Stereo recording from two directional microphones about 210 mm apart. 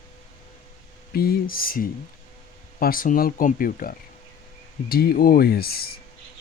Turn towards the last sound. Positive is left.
turn(degrees=45)  # may be behind; listen again after turning